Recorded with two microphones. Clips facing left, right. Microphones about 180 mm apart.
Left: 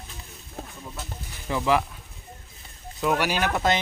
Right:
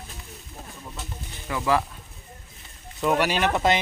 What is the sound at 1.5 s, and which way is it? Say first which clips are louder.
Speech: left 1 dB; 15° left (ahead or behind).